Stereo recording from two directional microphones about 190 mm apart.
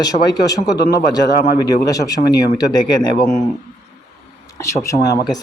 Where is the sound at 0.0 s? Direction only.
20° left (ahead or behind).